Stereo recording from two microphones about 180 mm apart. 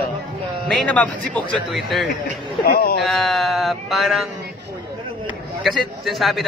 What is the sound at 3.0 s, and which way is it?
A man's voice, centre (ahead or behind).